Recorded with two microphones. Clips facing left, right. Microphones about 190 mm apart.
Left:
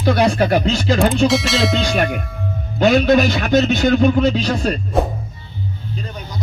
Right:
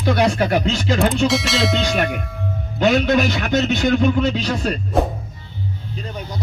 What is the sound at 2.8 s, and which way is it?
A man's voice, 35° left (ahead or behind).